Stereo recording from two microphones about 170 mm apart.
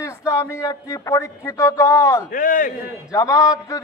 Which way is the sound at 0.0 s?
20° left (ahead or behind).